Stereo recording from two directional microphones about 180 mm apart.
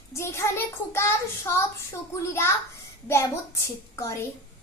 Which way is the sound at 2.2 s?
15° left (ahead or behind).